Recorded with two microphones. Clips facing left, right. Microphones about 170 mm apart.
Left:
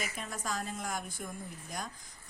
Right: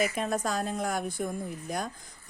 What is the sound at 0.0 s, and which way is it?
Speech, 80° right.